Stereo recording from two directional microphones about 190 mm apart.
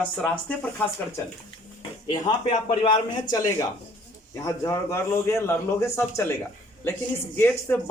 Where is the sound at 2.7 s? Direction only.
35° left (ahead or behind).